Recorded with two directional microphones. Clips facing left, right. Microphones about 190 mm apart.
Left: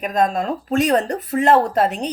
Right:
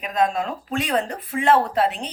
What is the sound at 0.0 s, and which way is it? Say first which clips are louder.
Speech: left 3 dB; 45° left (ahead or behind).